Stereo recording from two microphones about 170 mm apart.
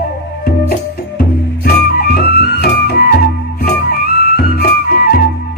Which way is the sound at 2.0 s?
70° left (ahead or behind).